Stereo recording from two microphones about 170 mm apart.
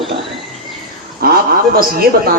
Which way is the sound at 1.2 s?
60° right (ahead or behind).